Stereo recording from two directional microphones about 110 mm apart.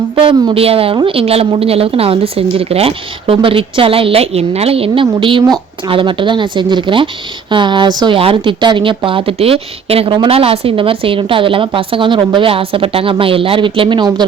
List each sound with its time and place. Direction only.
0.5 s a woman's voice: 60° right (ahead or behind)
5.2 s a woman's voice: 50° right (ahead or behind)